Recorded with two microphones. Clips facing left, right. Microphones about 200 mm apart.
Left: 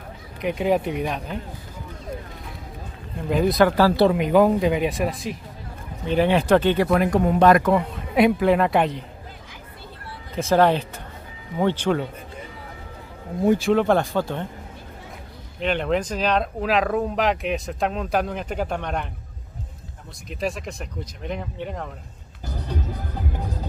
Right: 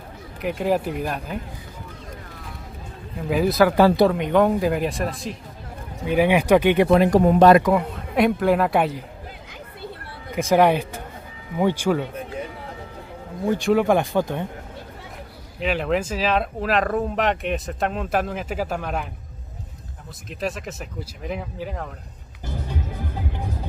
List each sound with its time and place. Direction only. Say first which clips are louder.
0.4 s speech: left 1 dB; 5° right (ahead or behind)
3.2 s speech: even; 5° right (ahead or behind)
3.7 s speech: right 2 dB; 20° right (ahead or behind)
4.1 s speech: left 1 dB; 5° left (ahead or behind)
6.0 s speech: right 1 dB; 10° right (ahead or behind); by 7.5 s 40° right (ahead or behind)
7.7 s speech: left 1 dB; centre (ahead or behind)
10.3 s speech: right 1 dB; 15° right (ahead or behind)
13.6 s speech: right 1 dB; centre (ahead or behind)
13.8 s speech: right 1 dB; 15° right (ahead or behind)
15.6 s speech: even; 5° right (ahead or behind)
20.2 s speech: left 1 dB; centre (ahead or behind)